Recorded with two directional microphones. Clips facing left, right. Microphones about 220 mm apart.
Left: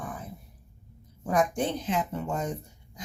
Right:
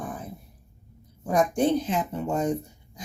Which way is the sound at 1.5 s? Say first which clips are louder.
Right 5 dB; 10° right (ahead or behind).